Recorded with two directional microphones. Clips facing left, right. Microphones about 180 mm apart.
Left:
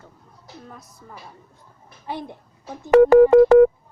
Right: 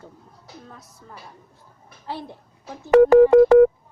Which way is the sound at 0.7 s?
10° left (ahead or behind).